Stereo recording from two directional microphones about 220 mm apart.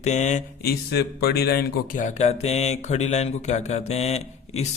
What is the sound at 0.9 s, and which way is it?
Speech, 45° left (ahead or behind).